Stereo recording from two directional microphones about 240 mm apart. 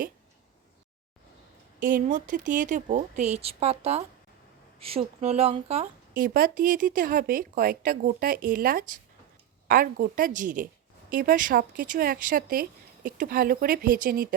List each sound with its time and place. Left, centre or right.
1.8 s speech: right